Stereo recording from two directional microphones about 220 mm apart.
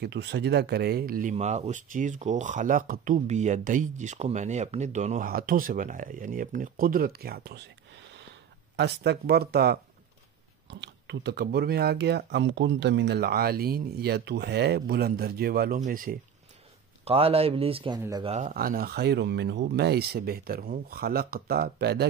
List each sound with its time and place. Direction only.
0.0 s speech: 50° right (ahead or behind)
1.3 s speech: 30° right (ahead or behind)
17.0 s speech: 25° right (ahead or behind)
18.3 s speech: 35° right (ahead or behind)